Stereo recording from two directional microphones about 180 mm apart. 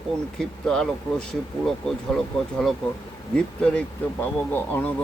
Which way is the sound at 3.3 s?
5° left (ahead or behind).